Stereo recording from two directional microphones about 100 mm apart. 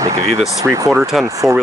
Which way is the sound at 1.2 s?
30° right (ahead or behind).